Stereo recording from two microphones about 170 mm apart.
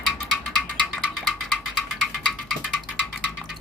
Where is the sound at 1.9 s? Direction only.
Centre (ahead or behind).